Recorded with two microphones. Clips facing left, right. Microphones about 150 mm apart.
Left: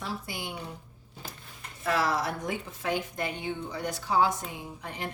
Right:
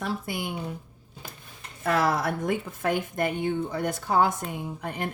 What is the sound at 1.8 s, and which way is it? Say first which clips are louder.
A woman's voice: right 3 dB; 50° right (ahead or behind).